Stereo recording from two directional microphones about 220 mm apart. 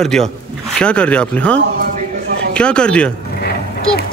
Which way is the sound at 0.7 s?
5° left (ahead or behind).